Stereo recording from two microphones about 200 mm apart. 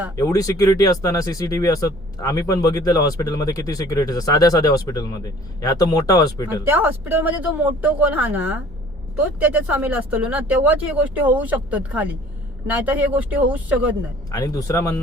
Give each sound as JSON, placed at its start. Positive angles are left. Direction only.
{"t": 0.2, "sound": "speech", "side_deg": 15}
{"t": 6.7, "sound": "speech", "side_deg": -10}
{"t": 14.3, "sound": "speech", "side_deg": 15}